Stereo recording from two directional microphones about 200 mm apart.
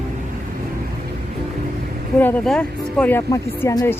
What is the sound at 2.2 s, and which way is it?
Speech, 10° left (ahead or behind).